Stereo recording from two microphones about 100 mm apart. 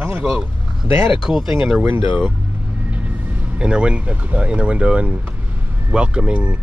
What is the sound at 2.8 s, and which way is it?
Speech, 15° right (ahead or behind).